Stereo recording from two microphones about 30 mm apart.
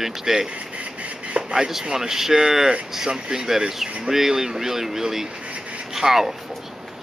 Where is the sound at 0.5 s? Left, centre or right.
Right.